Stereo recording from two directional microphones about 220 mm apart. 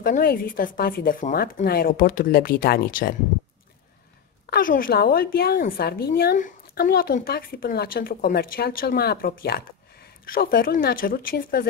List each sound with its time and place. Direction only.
0.0 s speech: 40° left (ahead or behind)
4.5 s a woman's voice: 40° left (ahead or behind)